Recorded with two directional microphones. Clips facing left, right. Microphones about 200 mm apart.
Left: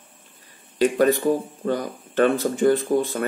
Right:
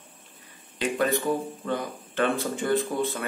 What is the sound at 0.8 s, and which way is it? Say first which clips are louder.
Speech: left 7 dB; 40° left (ahead or behind).